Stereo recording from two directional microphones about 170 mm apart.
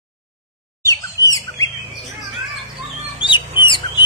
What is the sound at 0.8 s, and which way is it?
Bird, 20° left (ahead or behind).